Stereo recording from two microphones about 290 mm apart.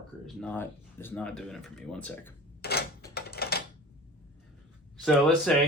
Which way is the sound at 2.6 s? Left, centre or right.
Left.